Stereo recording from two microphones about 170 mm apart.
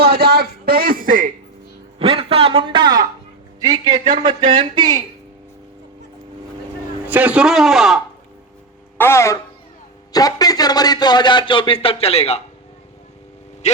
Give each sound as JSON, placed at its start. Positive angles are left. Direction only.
{"t": 0.0, "sound": "a man's voice", "side_deg": -70}
{"t": 2.0, "sound": "a man's voice", "side_deg": -30}
{"t": 3.9, "sound": "speech", "side_deg": -50}
{"t": 4.2, "sound": "speech", "side_deg": -30}
{"t": 7.1, "sound": "a man's voice", "side_deg": -10}
{"t": 9.0, "sound": "a man's voice", "side_deg": 15}